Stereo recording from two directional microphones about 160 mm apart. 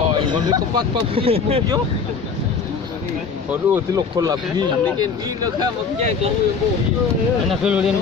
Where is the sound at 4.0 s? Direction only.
25° right (ahead or behind).